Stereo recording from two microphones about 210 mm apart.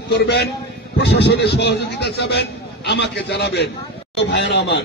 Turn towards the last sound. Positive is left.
turn(degrees=55)  # may be behind; listen again after turning